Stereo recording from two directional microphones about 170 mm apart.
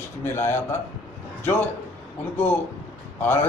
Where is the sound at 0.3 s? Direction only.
15° left (ahead or behind).